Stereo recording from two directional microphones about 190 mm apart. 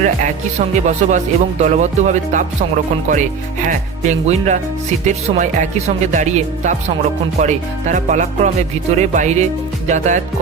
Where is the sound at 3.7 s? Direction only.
35° right (ahead or behind).